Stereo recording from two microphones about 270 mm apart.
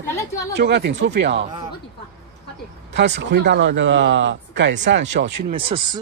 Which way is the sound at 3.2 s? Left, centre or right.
Right.